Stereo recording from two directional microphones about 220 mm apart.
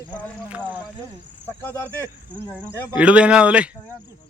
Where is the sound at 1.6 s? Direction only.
10° left (ahead or behind).